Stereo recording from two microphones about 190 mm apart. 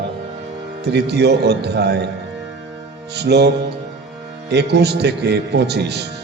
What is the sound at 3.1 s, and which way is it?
A man's voice, 60° right (ahead or behind).